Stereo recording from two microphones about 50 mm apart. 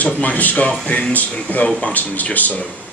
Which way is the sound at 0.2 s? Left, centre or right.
Left.